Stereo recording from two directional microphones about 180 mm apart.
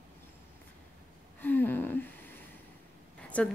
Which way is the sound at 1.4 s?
10° left (ahead or behind).